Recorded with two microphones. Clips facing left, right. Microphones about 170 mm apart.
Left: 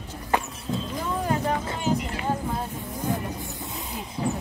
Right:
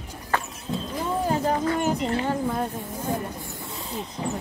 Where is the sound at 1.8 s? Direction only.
55° right (ahead or behind).